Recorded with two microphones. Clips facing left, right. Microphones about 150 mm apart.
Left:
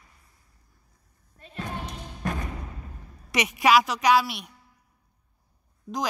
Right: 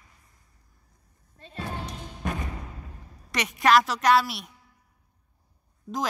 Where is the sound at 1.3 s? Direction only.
30° right (ahead or behind).